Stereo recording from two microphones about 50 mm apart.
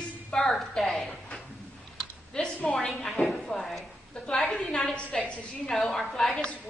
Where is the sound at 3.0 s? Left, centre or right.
Centre.